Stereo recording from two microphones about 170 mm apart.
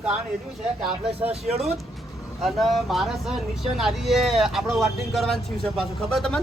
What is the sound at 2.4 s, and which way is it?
Speech, centre (ahead or behind).